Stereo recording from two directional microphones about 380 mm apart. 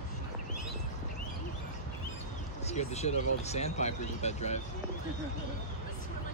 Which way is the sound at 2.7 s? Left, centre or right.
Centre.